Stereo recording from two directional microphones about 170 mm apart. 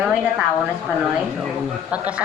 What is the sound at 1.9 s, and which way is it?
Speech, 10° right (ahead or behind).